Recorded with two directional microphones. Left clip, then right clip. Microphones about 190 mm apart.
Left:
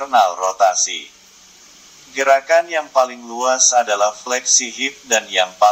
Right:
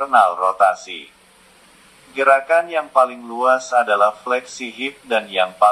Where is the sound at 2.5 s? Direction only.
35° left (ahead or behind).